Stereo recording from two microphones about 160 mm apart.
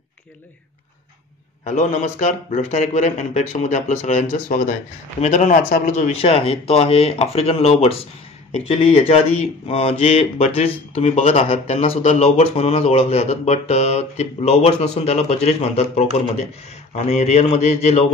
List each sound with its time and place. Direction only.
1.6 s a man's voice: 50° left (ahead or behind)
6.1 s a man's voice: 35° left (ahead or behind)